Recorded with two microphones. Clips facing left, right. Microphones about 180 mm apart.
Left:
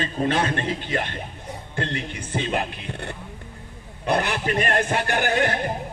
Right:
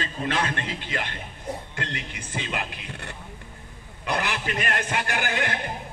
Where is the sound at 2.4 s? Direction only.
35° left (ahead or behind).